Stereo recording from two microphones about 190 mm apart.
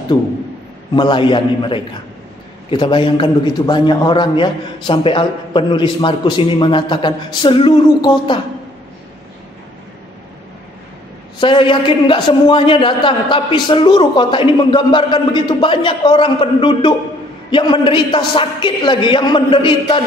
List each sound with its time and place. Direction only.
0.9 s a man's voice: 25° left (ahead or behind)
11.3 s a man's voice: 25° left (ahead or behind)